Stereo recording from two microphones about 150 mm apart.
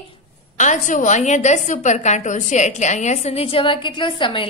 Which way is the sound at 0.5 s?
55° left (ahead or behind).